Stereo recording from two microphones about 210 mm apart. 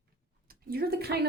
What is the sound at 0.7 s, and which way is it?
Speech, 45° right (ahead or behind).